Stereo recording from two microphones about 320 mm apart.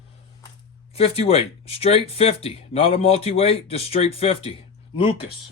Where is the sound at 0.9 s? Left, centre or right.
Centre.